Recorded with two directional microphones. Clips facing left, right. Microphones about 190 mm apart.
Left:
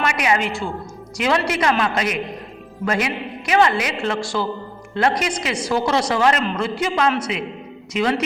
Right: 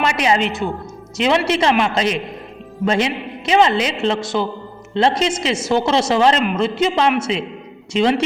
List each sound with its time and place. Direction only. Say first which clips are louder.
0.0 s a man's voice: right 3 dB; 25° right (ahead or behind)